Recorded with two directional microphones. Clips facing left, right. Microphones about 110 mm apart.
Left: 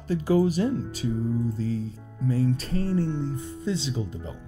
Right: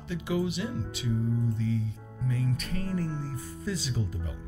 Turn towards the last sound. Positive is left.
turn(degrees=25)  # may be behind; listen again after turning